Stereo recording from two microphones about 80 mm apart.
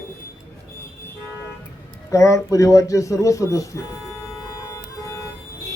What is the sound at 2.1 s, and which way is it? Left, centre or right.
Speech, left.